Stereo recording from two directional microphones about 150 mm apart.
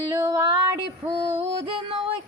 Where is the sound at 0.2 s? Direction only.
25° right (ahead or behind).